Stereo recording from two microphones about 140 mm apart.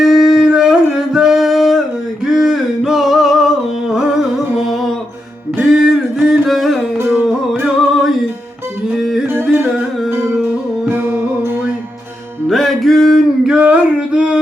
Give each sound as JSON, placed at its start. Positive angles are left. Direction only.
{"t": 0.0, "sound": "singing", "side_deg": 0}
{"t": 2.2, "sound": "a sound", "side_deg": 0}
{"t": 3.8, "sound": "music", "side_deg": -5}
{"t": 5.8, "sound": "music", "side_deg": 0}
{"t": 9.2, "sound": "music", "side_deg": -15}
{"t": 12.5, "sound": "a sound", "side_deg": 0}